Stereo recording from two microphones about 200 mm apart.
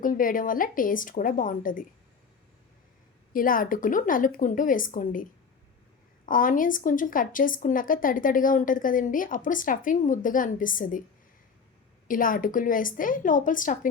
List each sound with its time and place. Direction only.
0.0 s speech: 45° left (ahead or behind)
3.3 s speech: 45° left (ahead or behind)
6.2 s speech: 40° left (ahead or behind)
12.0 s speech: 45° left (ahead or behind)